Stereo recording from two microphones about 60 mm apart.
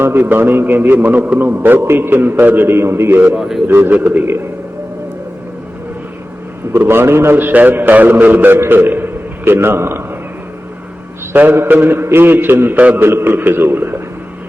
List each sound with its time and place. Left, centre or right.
0.0 s a man's voice: right
3.3 s a man's voice: centre
3.7 s a man's voice: right
6.7 s a man's voice: right
7.3 s a man's voice: right
8.5 s a man's voice: right
11.3 s a man's voice: right